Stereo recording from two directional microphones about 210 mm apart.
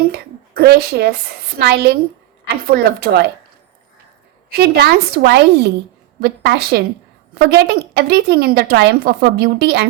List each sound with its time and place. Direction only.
0.1 s a sound: 50° right (ahead or behind)
1.5 s a woman's voice: 50° right (ahead or behind)
4.4 s a woman's voice: 50° right (ahead or behind)